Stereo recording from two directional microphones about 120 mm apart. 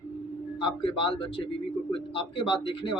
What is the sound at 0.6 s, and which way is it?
A man's voice, 45° left (ahead or behind).